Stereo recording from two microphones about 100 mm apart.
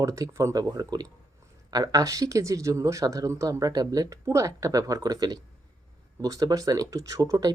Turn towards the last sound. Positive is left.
turn(degrees=-40)  # may be behind; listen again after turning